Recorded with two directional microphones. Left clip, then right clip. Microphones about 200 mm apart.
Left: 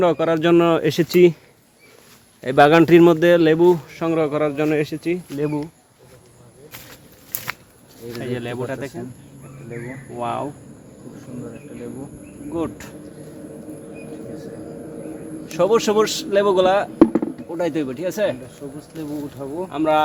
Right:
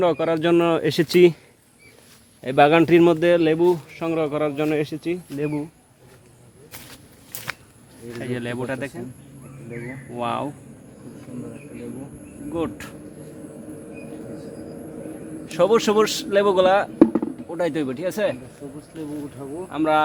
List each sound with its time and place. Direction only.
0.0 s speech: centre (ahead or behind)
2.4 s a man's voice: 10° left (ahead or behind)
6.7 s a sound: centre (ahead or behind)
8.2 s speech: 10° right (ahead or behind)
10.2 s speech: 25° right (ahead or behind)
12.5 s speech: 25° right (ahead or behind)
15.4 s speech: 25° right (ahead or behind)
17.0 s chop: 20° left (ahead or behind)
17.5 s speech: 20° right (ahead or behind)
18.9 s speech: 40° left (ahead or behind)
19.4 s speech: 50° left (ahead or behind)
19.7 s speech: 15° right (ahead or behind)